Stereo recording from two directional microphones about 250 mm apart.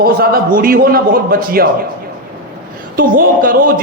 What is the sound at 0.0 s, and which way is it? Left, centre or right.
A man's voice, right.